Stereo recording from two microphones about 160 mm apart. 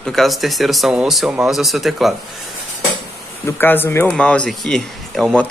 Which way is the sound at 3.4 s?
15° left (ahead or behind).